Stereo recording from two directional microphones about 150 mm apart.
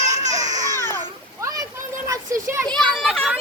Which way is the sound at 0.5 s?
25° right (ahead or behind).